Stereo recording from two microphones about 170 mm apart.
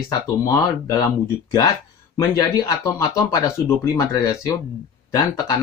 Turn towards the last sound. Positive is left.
turn(degrees=20)  # may be behind; listen again after turning